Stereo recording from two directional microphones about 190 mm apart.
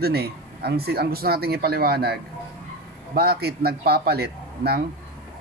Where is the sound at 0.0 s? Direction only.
55° right (ahead or behind).